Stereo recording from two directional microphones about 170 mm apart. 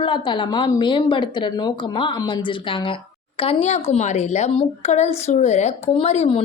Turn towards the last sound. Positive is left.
turn(degrees=35)  # may be behind; listen again after turning